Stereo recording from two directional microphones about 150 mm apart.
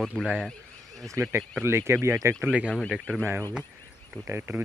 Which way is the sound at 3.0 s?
5° left (ahead or behind).